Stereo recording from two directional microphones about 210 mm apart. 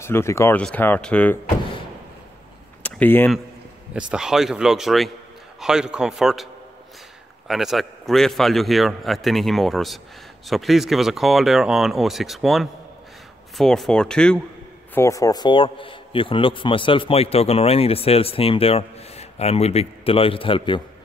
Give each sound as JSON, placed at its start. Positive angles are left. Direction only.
{"t": 0.0, "sound": "speech", "side_deg": 10}
{"t": 2.8, "sound": "speech", "side_deg": 10}
{"t": 3.9, "sound": "a man's voice", "side_deg": -5}
{"t": 7.4, "sound": "a man's voice", "side_deg": 0}
{"t": 15.0, "sound": "a man's voice", "side_deg": 15}